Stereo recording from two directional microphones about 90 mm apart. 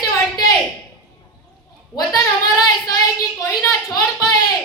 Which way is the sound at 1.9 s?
45° left (ahead or behind).